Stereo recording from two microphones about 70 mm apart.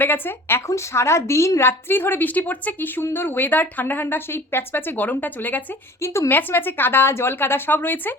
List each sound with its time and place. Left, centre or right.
0.0 s a woman's voice: left
6.0 s a woman's voice: left
6.3 s a woman's voice: left